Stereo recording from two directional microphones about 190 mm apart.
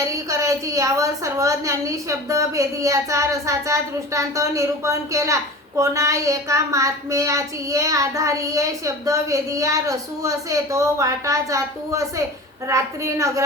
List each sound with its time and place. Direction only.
0.3 s a woman's voice: 15° right (ahead or behind)